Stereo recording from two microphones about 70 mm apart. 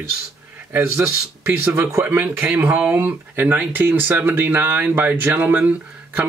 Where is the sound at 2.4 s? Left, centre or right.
Right.